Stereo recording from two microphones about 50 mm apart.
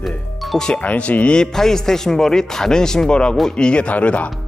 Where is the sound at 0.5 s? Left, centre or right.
Centre.